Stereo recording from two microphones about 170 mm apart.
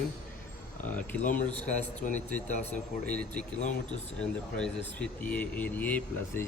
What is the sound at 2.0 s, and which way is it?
Speech, 50° left (ahead or behind).